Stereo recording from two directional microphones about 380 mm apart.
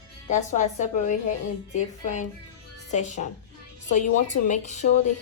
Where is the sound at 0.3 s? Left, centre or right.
Centre.